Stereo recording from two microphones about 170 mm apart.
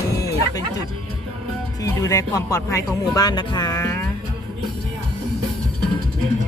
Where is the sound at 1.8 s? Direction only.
20° left (ahead or behind).